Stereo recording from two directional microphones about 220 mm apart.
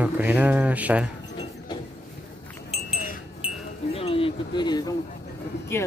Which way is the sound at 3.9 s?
25° left (ahead or behind).